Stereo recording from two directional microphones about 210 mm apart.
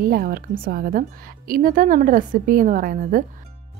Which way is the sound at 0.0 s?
45° right (ahead or behind).